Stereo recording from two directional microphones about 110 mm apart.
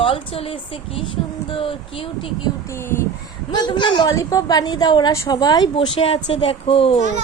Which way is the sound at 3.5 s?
45° left (ahead or behind).